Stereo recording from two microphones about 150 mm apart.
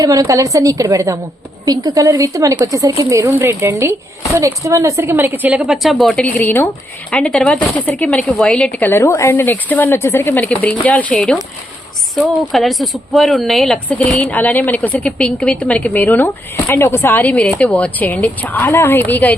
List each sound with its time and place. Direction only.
0.0 s a woman's voice: 20° right (ahead or behind); by 19.3 s 10° left (ahead or behind)